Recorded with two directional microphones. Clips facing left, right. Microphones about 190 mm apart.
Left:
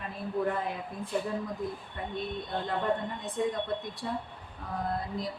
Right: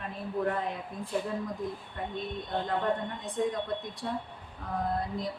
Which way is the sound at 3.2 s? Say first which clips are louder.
Even; centre (ahead or behind).